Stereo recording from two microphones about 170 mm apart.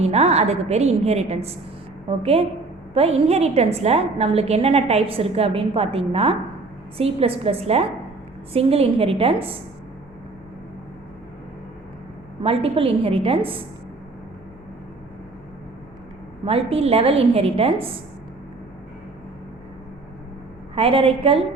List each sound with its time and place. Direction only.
0.0 s a woman's voice: 40° right (ahead or behind)
12.4 s a woman's voice: 35° right (ahead or behind)
16.5 s a woman's voice: 35° right (ahead or behind)
20.7 s a woman's voice: 35° right (ahead or behind)